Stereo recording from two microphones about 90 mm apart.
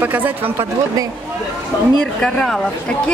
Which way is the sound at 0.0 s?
20° right (ahead or behind).